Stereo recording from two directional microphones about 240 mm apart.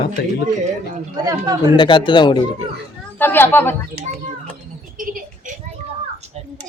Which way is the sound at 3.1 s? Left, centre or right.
Centre.